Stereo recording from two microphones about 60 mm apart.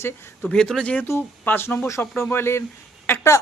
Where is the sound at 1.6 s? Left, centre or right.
Left.